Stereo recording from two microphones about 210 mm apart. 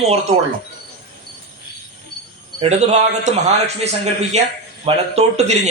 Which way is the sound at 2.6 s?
30° right (ahead or behind).